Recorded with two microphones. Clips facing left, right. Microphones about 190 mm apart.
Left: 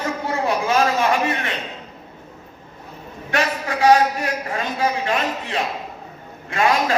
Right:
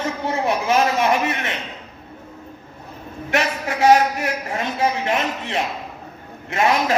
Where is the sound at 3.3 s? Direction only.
25° right (ahead or behind).